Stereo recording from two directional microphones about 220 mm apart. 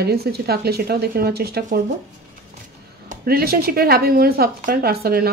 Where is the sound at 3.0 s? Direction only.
40° right (ahead or behind).